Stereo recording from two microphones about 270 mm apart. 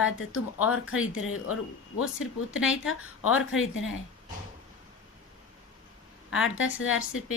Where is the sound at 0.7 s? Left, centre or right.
Left.